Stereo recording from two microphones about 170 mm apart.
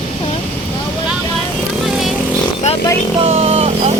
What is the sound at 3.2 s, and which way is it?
Vehicle, 35° right (ahead or behind).